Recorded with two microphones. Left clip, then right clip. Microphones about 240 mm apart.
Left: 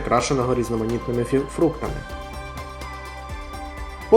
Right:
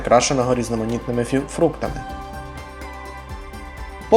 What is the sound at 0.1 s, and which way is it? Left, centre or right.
Speech, centre.